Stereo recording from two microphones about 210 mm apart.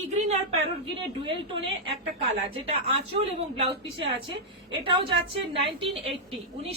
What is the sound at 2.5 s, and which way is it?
A woman's voice, 30° right (ahead or behind).